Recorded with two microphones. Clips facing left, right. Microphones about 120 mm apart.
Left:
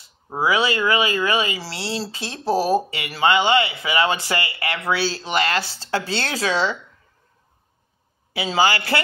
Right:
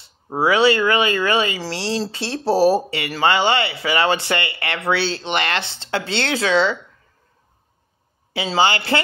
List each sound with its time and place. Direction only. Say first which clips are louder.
0.3 s speech: right 4 dB; 30° right (ahead or behind)
8.3 s speech: right 1 dB; 30° right (ahead or behind)